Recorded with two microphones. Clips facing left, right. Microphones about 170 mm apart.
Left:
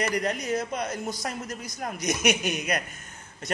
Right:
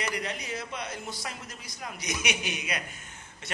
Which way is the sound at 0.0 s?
45° left (ahead or behind).